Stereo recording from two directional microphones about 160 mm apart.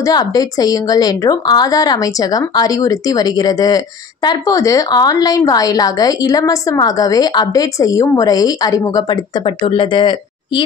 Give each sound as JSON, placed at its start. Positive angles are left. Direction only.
{"t": 0.0, "sound": "a woman's voice", "side_deg": 25}